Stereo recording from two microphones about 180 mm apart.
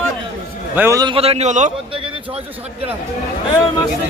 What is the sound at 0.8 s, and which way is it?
Speech, 15° right (ahead or behind).